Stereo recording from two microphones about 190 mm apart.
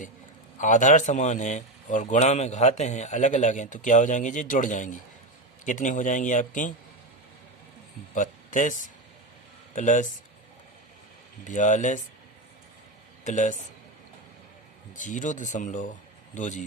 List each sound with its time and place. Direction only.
0.6 s a man's voice: 40° left (ahead or behind)
8.1 s a sound: 45° left (ahead or behind)
9.7 s a man's voice: 40° left (ahead or behind)
11.4 s a man's voice: 40° left (ahead or behind)
13.2 s a man's voice: 40° left (ahead or behind)
14.9 s a man's voice: 40° left (ahead or behind)